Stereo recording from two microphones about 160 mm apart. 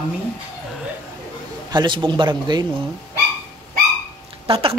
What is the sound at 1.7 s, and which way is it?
Speech, 25° right (ahead or behind).